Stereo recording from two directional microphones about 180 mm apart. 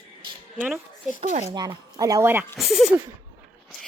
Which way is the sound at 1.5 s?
20° right (ahead or behind).